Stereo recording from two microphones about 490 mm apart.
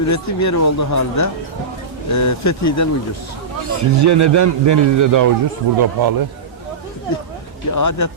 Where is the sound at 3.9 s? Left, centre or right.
Right.